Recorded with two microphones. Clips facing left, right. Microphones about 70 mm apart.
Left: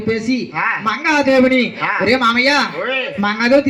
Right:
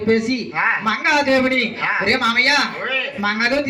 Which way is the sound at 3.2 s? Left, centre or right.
Left.